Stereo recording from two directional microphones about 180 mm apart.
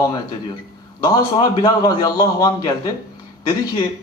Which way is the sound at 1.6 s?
20° left (ahead or behind).